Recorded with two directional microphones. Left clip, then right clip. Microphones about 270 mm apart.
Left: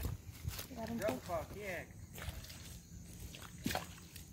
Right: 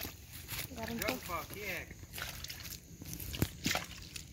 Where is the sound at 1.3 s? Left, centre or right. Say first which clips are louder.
Right 2 dB; left.